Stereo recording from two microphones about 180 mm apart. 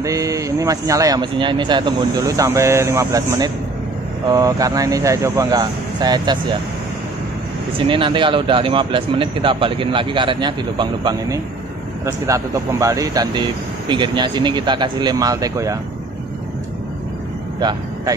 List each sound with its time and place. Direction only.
0.0 s speech: 20° right (ahead or behind)
7.7 s speech: 30° right (ahead or behind)
17.6 s speech: 25° right (ahead or behind)